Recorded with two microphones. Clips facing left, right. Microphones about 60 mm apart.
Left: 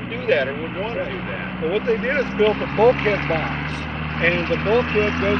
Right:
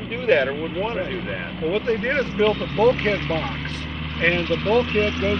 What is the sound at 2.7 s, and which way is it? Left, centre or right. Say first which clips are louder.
Speech: left 3 dB; left.